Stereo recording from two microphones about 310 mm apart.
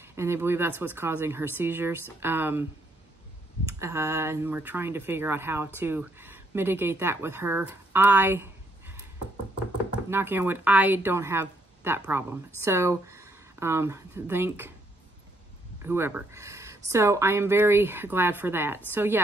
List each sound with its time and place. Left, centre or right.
0.0 s speech: centre
3.6 s speech: centre
10.0 s speech: centre
15.8 s speech: centre